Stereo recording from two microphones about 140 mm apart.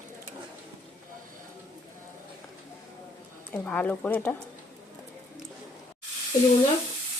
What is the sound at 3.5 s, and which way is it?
Speech, 10° left (ahead or behind).